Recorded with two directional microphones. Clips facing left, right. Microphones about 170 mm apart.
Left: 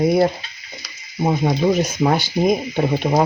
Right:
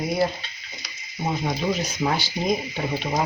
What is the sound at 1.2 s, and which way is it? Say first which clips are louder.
Speech: left 7 dB; 50° left (ahead or behind).